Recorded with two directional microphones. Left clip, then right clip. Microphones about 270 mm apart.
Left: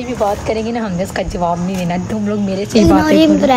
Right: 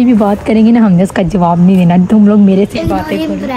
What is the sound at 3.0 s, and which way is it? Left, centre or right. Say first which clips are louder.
Speech: left 6 dB; left.